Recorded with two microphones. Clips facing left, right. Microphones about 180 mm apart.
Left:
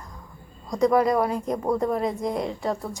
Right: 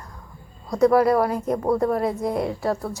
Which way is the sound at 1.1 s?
5° right (ahead or behind).